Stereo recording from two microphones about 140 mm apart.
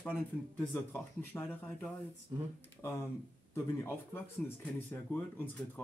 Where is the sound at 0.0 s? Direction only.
10° left (ahead or behind).